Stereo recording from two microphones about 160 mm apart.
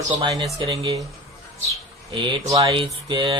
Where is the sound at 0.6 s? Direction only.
35° right (ahead or behind).